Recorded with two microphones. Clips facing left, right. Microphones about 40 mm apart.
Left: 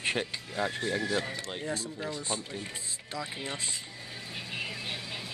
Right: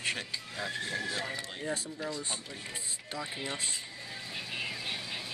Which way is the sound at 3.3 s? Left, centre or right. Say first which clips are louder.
Even; centre.